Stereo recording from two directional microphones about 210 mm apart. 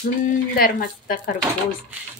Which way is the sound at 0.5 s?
45° left (ahead or behind).